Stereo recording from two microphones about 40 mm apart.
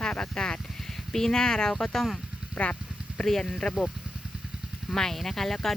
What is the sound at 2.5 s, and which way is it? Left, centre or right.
Speech, left.